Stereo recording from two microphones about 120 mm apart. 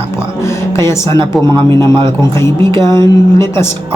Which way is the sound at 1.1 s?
40° right (ahead or behind).